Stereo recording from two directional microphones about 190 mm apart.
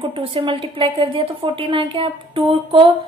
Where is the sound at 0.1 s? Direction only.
30° right (ahead or behind).